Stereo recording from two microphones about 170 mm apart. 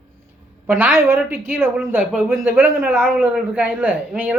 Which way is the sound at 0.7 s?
10° right (ahead or behind).